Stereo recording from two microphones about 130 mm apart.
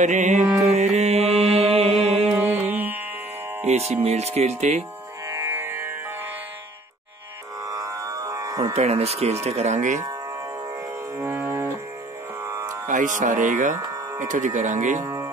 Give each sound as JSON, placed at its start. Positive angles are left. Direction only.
{"t": 0.0, "sound": "speech", "side_deg": -65}
{"t": 0.7, "sound": "music", "side_deg": -60}
{"t": 2.7, "sound": "music", "side_deg": -15}
{"t": 3.6, "sound": "speech", "side_deg": -55}
{"t": 5.3, "sound": "music", "side_deg": -15}
{"t": 7.6, "sound": "music", "side_deg": -25}
{"t": 8.7, "sound": "speech", "side_deg": -55}
{"t": 11.1, "sound": "music", "side_deg": -20}
{"t": 12.8, "sound": "speech", "side_deg": -90}
{"t": 13.2, "sound": "speech", "side_deg": -75}
{"t": 13.7, "sound": "music", "side_deg": -25}
{"t": 14.2, "sound": "speech", "side_deg": -80}
{"t": 15.0, "sound": "music", "side_deg": -25}